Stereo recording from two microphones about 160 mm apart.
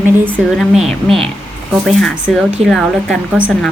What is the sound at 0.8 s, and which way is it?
Speech, 35° right (ahead or behind).